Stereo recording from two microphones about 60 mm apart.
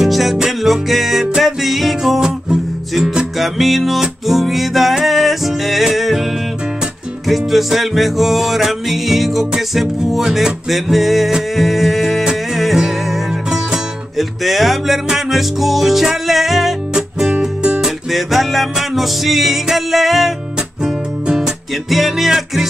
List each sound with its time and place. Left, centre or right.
0.0 s music: centre
7.2 s music: centre
17.3 s music: centre
17.7 s music: centre